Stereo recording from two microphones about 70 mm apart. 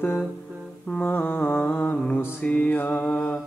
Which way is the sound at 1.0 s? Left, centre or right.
Left.